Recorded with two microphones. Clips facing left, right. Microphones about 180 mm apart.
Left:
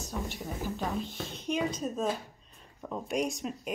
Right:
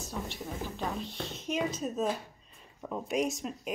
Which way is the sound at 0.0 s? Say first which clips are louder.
Left 1 dB; centre (ahead or behind).